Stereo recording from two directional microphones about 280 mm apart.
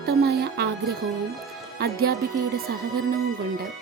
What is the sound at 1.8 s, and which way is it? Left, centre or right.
Music, right.